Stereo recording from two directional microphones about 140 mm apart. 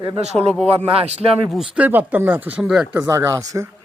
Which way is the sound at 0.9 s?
45° right (ahead or behind).